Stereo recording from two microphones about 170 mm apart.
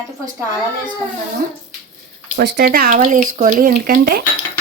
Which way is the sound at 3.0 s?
50° right (ahead or behind).